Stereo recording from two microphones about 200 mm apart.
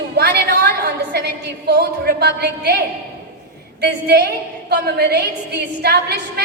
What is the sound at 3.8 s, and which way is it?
A woman's voice, 55° right (ahead or behind).